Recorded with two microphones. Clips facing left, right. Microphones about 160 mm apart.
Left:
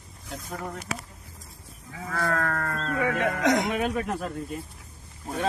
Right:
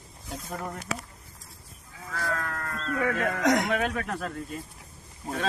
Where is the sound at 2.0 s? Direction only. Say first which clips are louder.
Left 5 dB; 85° left.